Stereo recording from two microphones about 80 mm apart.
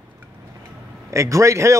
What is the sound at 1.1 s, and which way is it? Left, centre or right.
Speech, right.